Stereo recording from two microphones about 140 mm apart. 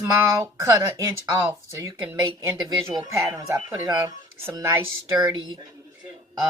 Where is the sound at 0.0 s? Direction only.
20° right (ahead or behind).